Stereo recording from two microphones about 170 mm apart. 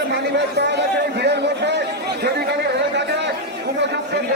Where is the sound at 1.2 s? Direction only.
85° right.